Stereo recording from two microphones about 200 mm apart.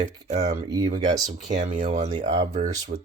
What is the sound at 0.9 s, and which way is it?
Speech, 35° right (ahead or behind).